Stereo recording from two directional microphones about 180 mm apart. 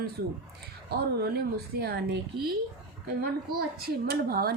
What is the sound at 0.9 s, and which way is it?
A woman's voice, 60° right (ahead or behind).